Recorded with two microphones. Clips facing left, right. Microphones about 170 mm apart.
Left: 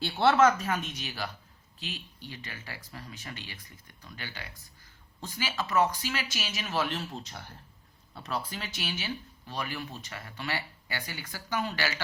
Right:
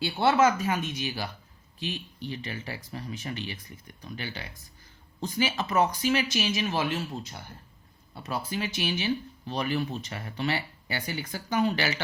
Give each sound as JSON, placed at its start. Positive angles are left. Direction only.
{"t": 0.0, "sound": "speech", "side_deg": -5}
{"t": 2.3, "sound": "speech", "side_deg": -20}